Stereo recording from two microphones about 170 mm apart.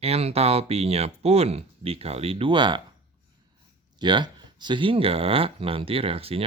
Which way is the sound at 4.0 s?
25° right (ahead or behind).